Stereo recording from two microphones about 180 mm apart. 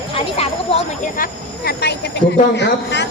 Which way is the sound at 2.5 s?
75° left (ahead or behind).